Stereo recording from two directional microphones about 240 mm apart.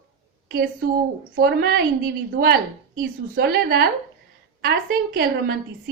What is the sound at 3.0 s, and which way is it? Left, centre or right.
Speech, right.